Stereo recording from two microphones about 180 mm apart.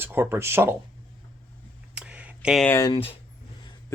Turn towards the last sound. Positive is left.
turn(degrees=30)  # may be behind; listen again after turning